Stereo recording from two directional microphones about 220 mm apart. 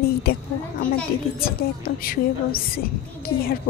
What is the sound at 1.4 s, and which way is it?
A woman's voice, 40° left (ahead or behind).